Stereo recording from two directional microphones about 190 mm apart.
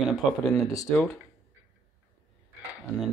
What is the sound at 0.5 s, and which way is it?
Speech, 20° left (ahead or behind).